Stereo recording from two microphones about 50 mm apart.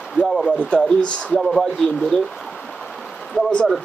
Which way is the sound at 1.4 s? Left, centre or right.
Centre.